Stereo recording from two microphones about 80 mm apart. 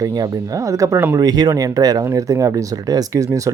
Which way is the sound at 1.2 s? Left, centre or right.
Right.